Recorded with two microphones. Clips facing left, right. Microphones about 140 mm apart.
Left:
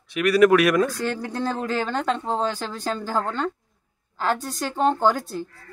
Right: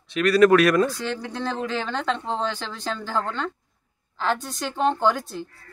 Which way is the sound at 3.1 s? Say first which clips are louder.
Left 1 dB; 10° left (ahead or behind).